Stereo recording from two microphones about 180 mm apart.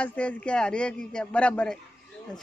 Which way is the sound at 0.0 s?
5° left (ahead or behind).